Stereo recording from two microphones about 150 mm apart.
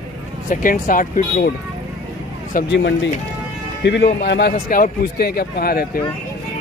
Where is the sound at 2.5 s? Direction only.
70° left (ahead or behind).